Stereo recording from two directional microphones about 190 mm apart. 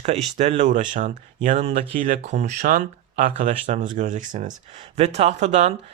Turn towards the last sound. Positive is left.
turn(degrees=-40)  # may be behind; listen again after turning